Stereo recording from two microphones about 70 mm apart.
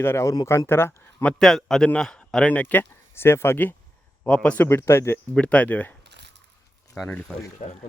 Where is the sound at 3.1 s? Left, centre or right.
Left.